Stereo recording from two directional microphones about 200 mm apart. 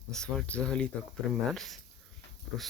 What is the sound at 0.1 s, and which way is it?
Speech, 5° left (ahead or behind).